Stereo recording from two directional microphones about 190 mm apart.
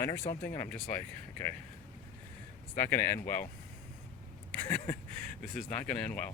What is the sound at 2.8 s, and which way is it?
Speech, 10° left (ahead or behind).